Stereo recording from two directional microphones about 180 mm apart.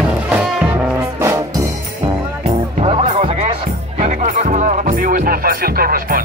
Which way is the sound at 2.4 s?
35° right (ahead or behind).